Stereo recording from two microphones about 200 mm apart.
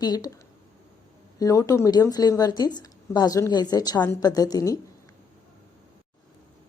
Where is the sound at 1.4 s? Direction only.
15° left (ahead or behind).